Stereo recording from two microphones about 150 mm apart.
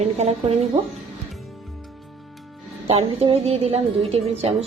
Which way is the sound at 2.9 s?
40° right (ahead or behind).